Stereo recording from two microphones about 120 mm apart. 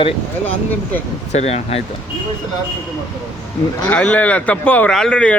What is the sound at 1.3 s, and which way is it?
Speech, 65° left (ahead or behind).